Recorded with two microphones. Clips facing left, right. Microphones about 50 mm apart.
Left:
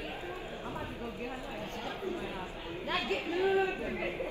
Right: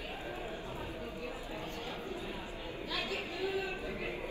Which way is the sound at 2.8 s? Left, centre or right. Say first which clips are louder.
Left 5 dB; left.